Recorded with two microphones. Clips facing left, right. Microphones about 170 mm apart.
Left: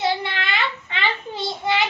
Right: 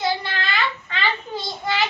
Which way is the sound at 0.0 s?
20° left (ahead or behind).